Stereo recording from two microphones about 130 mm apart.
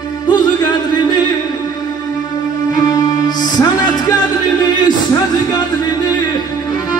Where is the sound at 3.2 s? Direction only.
30° left (ahead or behind).